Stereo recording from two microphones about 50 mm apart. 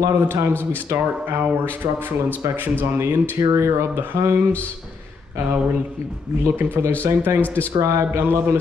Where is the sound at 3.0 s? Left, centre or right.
Right.